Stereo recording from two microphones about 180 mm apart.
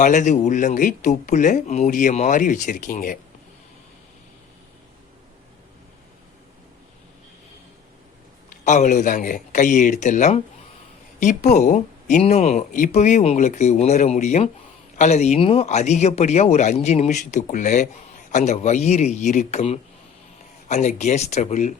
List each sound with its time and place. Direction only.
0.0 s speech: 45° left (ahead or behind)
8.4 s speech: 40° left (ahead or behind)